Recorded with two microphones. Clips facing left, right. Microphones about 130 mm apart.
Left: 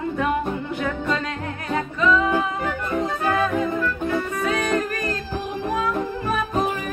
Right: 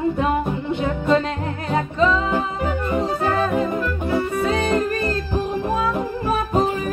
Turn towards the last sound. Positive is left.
turn(degrees=-25)  # may be behind; listen again after turning